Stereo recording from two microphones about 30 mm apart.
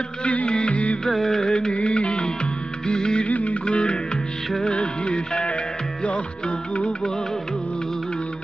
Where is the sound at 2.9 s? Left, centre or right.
Left.